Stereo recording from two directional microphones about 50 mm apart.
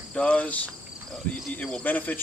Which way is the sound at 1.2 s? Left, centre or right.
Left.